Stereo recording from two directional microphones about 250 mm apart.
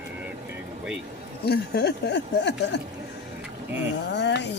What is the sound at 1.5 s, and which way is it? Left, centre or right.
Speech, left.